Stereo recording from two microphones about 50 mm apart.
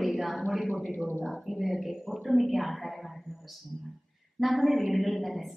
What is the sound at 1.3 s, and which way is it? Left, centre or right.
A woman's voice, centre.